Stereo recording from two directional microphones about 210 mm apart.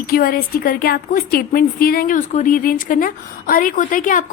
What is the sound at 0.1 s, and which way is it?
A woman's voice, 45° left (ahead or behind).